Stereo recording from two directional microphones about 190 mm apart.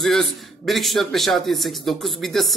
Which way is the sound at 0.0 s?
Centre (ahead or behind).